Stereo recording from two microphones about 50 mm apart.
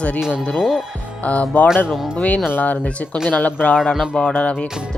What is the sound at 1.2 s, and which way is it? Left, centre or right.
Music, left.